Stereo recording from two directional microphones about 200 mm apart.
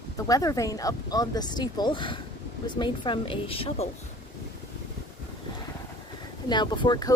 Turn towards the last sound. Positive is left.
turn(degrees=20)  # may be behind; listen again after turning